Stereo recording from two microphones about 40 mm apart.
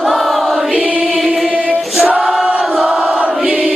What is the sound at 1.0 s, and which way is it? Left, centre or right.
Choir, centre.